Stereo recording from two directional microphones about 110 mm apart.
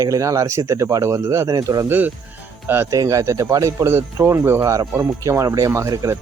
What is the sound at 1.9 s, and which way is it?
Speech, 15° right (ahead or behind).